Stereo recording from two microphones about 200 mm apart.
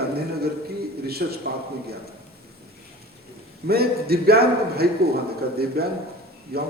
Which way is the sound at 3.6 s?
50° right (ahead or behind).